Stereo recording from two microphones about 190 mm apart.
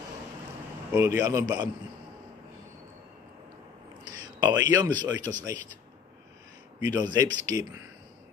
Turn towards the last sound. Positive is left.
turn(degrees=-15)  # may be behind; listen again after turning